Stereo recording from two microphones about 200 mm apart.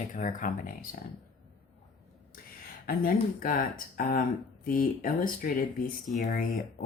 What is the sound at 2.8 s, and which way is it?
Speech, 45° left (ahead or behind).